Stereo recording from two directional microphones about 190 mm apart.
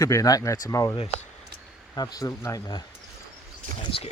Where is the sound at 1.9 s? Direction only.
20° left (ahead or behind).